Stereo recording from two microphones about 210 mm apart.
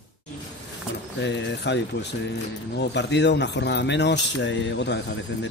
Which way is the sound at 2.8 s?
55° left (ahead or behind).